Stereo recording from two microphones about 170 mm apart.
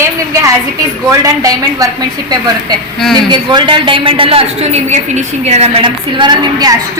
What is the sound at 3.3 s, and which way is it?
A woman's voice, 25° right (ahead or behind).